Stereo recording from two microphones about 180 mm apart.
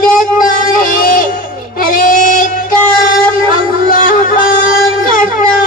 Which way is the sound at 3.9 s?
50° left (ahead or behind).